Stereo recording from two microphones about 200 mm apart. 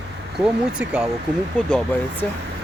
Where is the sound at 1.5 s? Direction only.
5° left (ahead or behind).